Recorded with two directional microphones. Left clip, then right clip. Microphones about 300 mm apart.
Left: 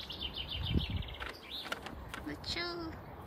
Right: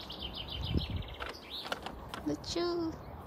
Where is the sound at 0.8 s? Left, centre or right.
Right.